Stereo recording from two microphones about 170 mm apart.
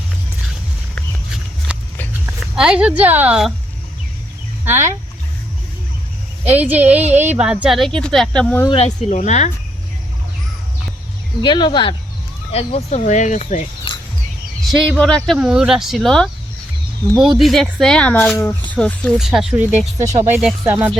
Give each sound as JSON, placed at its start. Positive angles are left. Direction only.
{"t": 1.7, "sound": "a sound", "side_deg": -5}
{"t": 2.2, "sound": "speech", "side_deg": -5}
{"t": 4.6, "sound": "speech", "side_deg": -10}
{"t": 6.5, "sound": "speech", "side_deg": -10}
{"t": 8.8, "sound": "speech", "side_deg": 40}
{"t": 11.4, "sound": "speech", "side_deg": 25}
{"t": 14.6, "sound": "speech", "side_deg": 5}
{"t": 15.4, "sound": "speech", "side_deg": -5}
{"t": 19.3, "sound": "speech", "side_deg": -5}